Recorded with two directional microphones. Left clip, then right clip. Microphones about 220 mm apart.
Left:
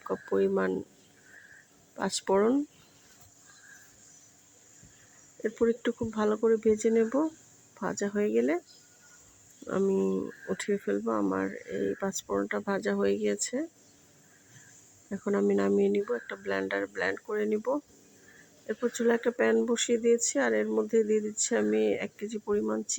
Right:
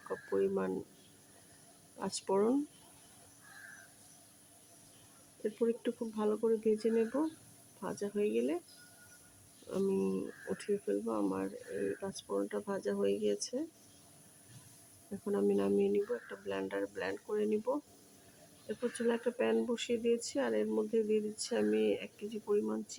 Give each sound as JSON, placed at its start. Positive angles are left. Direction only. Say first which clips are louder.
{"t": 0.1, "sound": "speech", "louder": "left 6 dB", "side_deg": 15}
{"t": 2.0, "sound": "speech", "louder": "left 7 dB", "side_deg": 10}
{"t": 5.4, "sound": "speech", "louder": "left 6 dB", "side_deg": 15}
{"t": 9.6, "sound": "speech", "louder": "left 6 dB", "side_deg": 15}
{"t": 15.2, "sound": "speech", "louder": "left 5 dB", "side_deg": 15}